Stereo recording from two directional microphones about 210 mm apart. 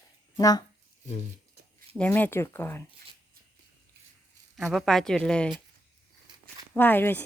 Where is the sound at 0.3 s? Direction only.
20° left (ahead or behind).